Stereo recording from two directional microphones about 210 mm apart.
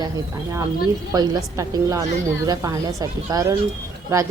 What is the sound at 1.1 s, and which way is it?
A woman's voice, 20° right (ahead or behind).